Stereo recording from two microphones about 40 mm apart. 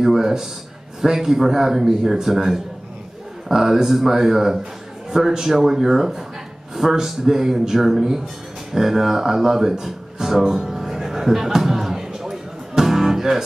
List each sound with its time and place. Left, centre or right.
0.0 s a man's voice: centre
8.7 s music: centre